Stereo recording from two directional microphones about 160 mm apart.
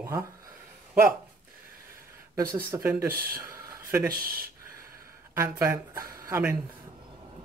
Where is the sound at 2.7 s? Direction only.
15° right (ahead or behind).